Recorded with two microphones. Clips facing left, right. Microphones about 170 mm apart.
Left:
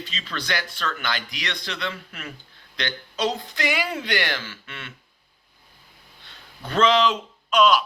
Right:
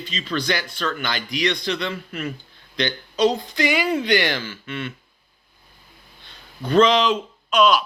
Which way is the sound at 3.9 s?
Centre (ahead or behind).